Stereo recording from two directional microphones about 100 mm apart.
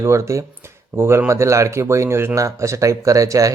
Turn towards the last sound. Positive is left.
turn(degrees=-35)  # may be behind; listen again after turning